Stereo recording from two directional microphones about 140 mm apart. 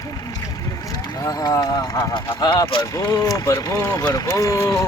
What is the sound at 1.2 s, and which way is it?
Speech, 25° left (ahead or behind).